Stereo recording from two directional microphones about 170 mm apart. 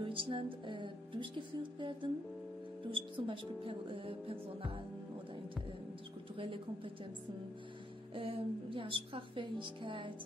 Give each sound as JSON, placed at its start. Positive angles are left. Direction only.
{"t": 0.0, "sound": "music", "side_deg": -30}
{"t": 2.8, "sound": "speech", "side_deg": -30}
{"t": 6.3, "sound": "speech", "side_deg": -30}
{"t": 8.1, "sound": "speech", "side_deg": -30}